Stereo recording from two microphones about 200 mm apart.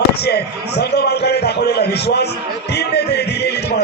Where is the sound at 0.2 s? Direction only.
55° left (ahead or behind).